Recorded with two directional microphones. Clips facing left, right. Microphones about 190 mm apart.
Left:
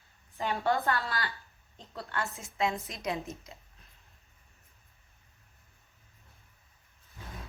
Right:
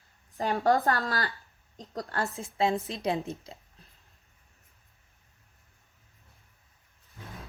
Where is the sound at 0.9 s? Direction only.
35° right (ahead or behind).